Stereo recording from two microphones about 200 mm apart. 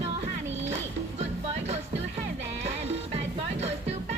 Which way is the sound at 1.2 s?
35° right (ahead or behind).